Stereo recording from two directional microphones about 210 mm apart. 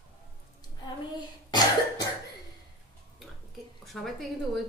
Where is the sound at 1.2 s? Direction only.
20° left (ahead or behind).